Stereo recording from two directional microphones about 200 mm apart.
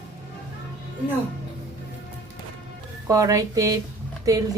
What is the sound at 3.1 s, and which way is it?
Speech, 15° right (ahead or behind).